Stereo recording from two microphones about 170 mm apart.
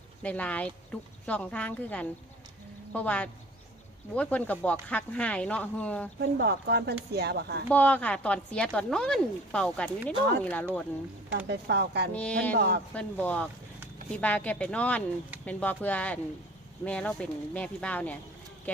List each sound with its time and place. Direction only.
0.2 s speech: 10° left (ahead or behind)
6.1 s speech: 80° right
7.7 s speech: 10° left (ahead or behind)
11.3 s speech: 85° right
12.1 s speech: 10° left (ahead or behind)
12.5 s speech: 75° right (ahead or behind)
12.9 s speech: 10° left (ahead or behind)